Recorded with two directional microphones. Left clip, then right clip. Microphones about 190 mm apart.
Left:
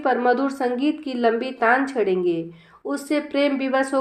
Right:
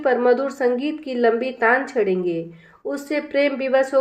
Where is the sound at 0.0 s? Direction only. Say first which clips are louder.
Right 2 dB; 15° left (ahead or behind).